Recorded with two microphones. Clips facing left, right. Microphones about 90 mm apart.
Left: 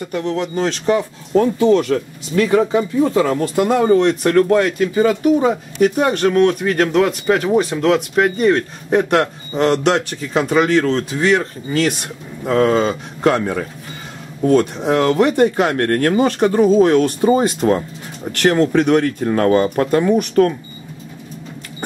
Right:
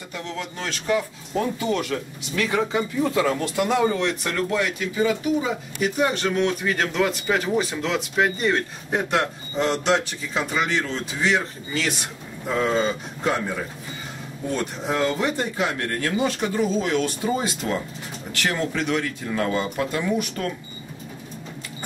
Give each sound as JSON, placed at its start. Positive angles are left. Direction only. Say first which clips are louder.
{"t": 0.1, "sound": "speech", "louder": "left 11 dB", "side_deg": 50}
{"t": 1.6, "sound": "speech", "louder": "left 11 dB", "side_deg": 35}
{"t": 12.4, "sound": "speech", "louder": "left 7 dB", "side_deg": 65}